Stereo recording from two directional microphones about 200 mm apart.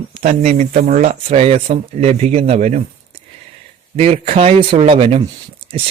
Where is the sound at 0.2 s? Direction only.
40° right (ahead or behind).